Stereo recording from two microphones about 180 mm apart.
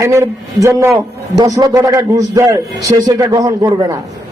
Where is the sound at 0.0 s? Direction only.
15° right (ahead or behind).